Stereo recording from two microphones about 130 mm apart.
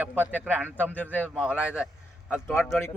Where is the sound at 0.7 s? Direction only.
10° left (ahead or behind).